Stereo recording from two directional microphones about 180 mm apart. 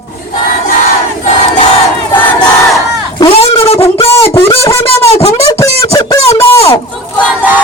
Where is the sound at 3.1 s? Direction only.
30° left (ahead or behind).